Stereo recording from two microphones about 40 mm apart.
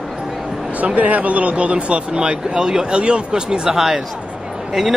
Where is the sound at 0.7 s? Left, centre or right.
Right.